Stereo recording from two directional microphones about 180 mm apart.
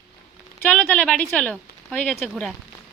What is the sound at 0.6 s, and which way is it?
Speech, 5° left (ahead or behind).